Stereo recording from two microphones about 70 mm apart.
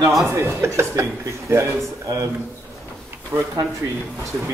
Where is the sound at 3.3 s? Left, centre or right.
Right.